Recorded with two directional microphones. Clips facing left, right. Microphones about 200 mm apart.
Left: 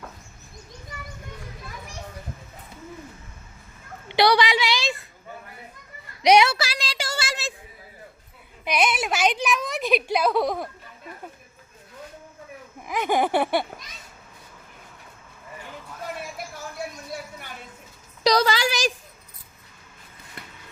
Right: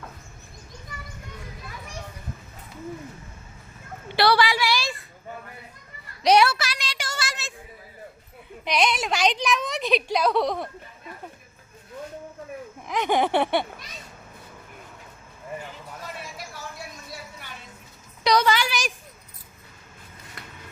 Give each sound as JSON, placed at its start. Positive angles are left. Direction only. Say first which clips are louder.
{"t": 4.1, "sound": "a sound", "louder": "left 1 dB", "side_deg": 15}
{"t": 6.2, "sound": "a woman's voice", "louder": "left 1 dB", "side_deg": 15}
{"t": 6.5, "sound": "a sound", "louder": "left 2 dB", "side_deg": 30}
{"t": 8.6, "sound": "a woman's voice", "louder": "even", "side_deg": 5}
{"t": 12.9, "sound": "a woman's voice", "louder": "even", "side_deg": 5}
{"t": 18.2, "sound": "a woman's voice", "louder": "left 1 dB", "side_deg": 35}